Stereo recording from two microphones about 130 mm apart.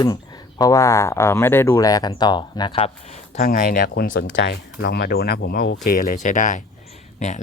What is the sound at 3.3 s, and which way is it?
Speech, 90° left.